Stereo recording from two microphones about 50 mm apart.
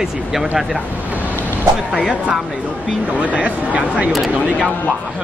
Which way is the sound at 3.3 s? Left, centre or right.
Right.